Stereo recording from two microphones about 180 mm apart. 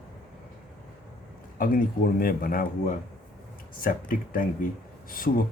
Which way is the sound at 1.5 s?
50° left (ahead or behind).